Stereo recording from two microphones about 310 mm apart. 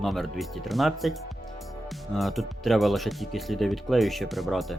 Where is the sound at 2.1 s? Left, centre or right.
Centre.